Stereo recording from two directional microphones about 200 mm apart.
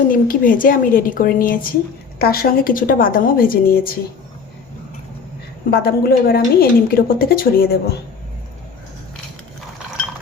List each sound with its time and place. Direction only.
0.1 s a woman's voice: 45° left (ahead or behind)
5.7 s a woman's voice: 50° left (ahead or behind)